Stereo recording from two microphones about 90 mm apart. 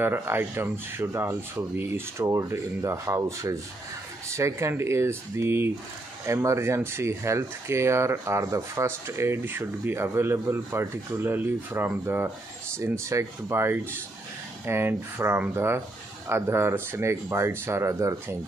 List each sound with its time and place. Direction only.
0.0 s speech: 25° right (ahead or behind)